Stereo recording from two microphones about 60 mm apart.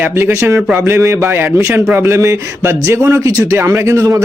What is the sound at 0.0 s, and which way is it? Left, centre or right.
A man's voice, right.